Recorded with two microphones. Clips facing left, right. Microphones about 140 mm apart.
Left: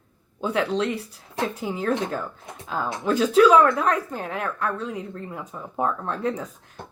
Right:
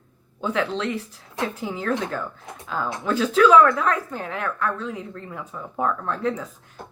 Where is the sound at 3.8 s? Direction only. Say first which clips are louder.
Even; 40° left (ahead or behind).